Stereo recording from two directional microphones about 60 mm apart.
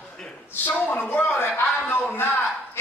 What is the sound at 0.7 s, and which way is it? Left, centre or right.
Speech, left.